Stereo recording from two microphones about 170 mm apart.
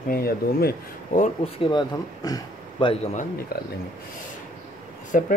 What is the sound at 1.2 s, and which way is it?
A man's voice, 35° left (ahead or behind).